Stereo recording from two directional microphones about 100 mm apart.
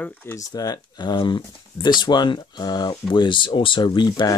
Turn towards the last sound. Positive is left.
turn(degrees=50)  # may be behind; listen again after turning